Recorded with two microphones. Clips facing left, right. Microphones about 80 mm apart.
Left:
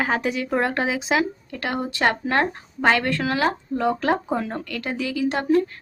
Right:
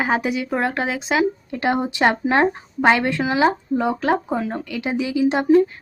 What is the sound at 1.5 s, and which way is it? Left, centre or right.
Speech, right.